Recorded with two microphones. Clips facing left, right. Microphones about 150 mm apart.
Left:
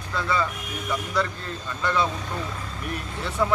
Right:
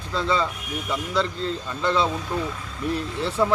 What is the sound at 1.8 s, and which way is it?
A man's voice, 25° right (ahead or behind).